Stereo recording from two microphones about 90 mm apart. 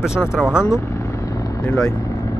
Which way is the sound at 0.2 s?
10° right (ahead or behind).